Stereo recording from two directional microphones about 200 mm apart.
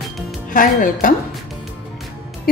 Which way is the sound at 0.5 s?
40° left (ahead or behind).